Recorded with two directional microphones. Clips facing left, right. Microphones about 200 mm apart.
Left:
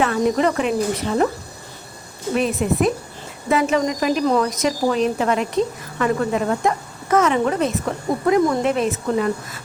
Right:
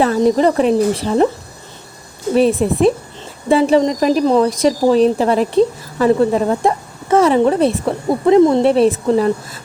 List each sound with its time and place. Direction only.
0.0 s speech: 35° right (ahead or behind)
2.3 s speech: 30° right (ahead or behind)